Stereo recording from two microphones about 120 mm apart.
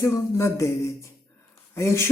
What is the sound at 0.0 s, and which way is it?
Speech, 25° left (ahead or behind).